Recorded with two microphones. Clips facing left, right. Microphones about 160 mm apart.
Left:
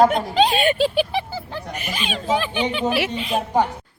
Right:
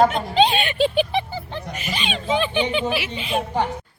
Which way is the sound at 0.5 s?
40° left (ahead or behind).